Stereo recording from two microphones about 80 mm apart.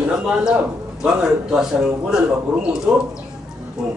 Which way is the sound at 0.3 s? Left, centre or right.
Centre.